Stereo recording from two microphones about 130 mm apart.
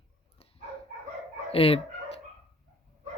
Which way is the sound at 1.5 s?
45° left (ahead or behind).